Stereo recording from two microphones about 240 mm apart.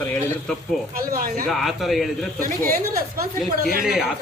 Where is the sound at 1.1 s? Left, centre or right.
Right.